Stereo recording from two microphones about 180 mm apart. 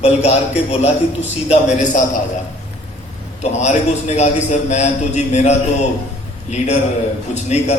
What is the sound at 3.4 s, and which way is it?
Speech, 40° left (ahead or behind).